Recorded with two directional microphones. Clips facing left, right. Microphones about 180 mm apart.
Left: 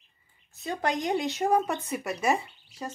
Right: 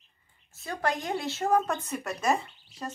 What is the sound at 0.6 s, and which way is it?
Speech, 20° left (ahead or behind).